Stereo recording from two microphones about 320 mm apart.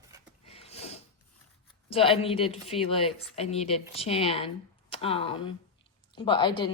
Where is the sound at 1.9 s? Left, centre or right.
Centre.